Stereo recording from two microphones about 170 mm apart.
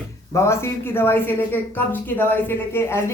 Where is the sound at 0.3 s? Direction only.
15° left (ahead or behind).